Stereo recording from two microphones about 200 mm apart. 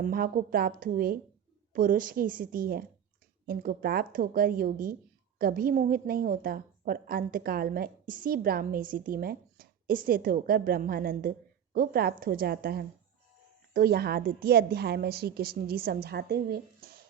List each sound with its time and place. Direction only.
0.0 s a woman's voice: 45° right (ahead or behind)